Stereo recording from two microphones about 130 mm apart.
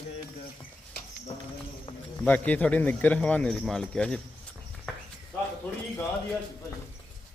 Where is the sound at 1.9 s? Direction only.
45° left (ahead or behind).